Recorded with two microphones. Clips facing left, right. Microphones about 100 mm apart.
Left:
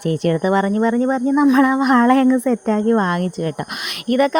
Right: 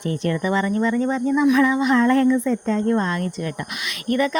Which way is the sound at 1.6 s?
55° left (ahead or behind).